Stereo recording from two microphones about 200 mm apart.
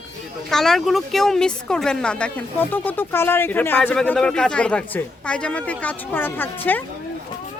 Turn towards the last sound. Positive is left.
turn(degrees=10)  # may be behind; listen again after turning